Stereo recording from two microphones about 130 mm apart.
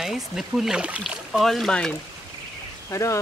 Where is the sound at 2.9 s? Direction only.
25° left (ahead or behind).